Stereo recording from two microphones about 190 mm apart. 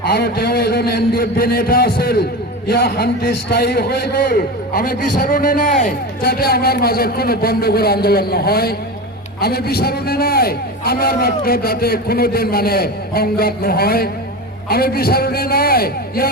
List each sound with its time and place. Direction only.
0.0 s a man's voice: 55° left (ahead or behind)